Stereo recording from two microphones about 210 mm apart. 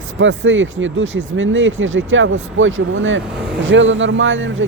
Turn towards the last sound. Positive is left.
turn(degrees=-65)  # may be behind; listen again after turning